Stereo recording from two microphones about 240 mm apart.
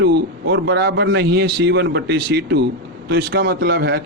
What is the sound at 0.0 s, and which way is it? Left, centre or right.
A man's voice, right.